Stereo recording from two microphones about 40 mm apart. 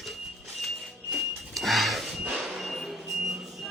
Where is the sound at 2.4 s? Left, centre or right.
Centre.